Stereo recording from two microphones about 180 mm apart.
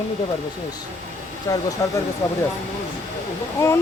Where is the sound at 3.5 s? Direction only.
15° left (ahead or behind).